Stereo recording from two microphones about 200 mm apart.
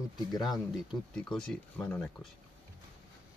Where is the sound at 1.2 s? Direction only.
5° left (ahead or behind).